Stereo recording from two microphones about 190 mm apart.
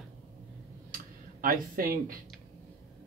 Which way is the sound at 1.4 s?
50° right (ahead or behind).